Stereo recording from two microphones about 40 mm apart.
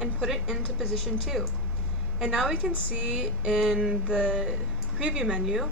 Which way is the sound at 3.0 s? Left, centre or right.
Centre.